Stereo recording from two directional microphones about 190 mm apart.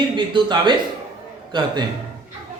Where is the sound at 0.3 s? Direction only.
25° right (ahead or behind).